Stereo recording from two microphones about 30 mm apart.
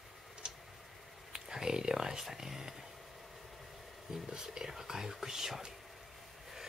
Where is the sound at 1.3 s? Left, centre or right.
Right.